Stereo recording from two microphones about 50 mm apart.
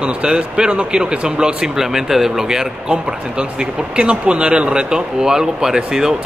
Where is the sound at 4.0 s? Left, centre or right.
Right.